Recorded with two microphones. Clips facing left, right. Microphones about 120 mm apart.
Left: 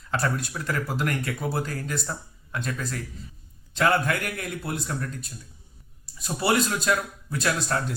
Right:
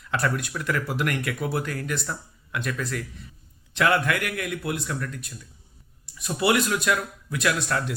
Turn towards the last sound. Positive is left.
turn(degrees=35)  # may be behind; listen again after turning